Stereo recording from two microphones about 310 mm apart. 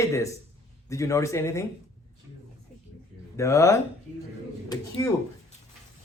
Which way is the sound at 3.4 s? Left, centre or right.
Centre.